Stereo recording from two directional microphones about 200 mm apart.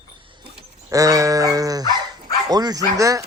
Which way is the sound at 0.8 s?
15° right (ahead or behind).